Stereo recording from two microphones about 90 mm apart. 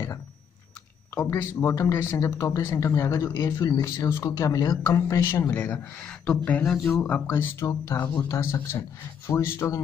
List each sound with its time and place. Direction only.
1.2 s speech: 25° left (ahead or behind)
7.2 s speech: 30° left (ahead or behind)
8.0 s speech: 20° left (ahead or behind)